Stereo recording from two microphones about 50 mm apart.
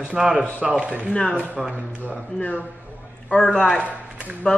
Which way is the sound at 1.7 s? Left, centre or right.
Right.